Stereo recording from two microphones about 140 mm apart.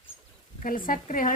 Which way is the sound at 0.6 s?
80° left.